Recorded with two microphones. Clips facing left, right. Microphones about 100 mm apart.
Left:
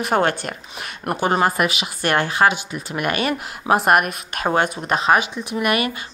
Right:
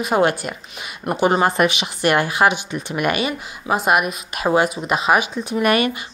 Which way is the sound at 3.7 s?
Centre (ahead or behind).